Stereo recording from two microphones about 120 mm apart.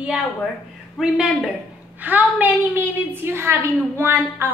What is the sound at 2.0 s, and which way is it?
A woman's voice, 15° right (ahead or behind).